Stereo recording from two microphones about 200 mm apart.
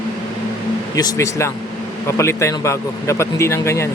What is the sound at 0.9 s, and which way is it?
Speech, 20° left (ahead or behind).